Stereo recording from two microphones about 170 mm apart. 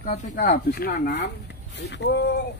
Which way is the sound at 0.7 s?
65° left (ahead or behind).